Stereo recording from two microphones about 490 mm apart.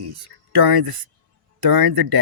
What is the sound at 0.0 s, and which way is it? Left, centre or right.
Speech, right.